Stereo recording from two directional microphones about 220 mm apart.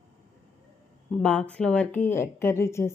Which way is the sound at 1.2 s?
5° left (ahead or behind).